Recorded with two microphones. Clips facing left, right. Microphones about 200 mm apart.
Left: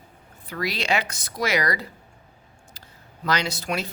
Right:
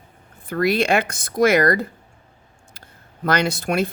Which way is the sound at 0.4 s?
50° right (ahead or behind).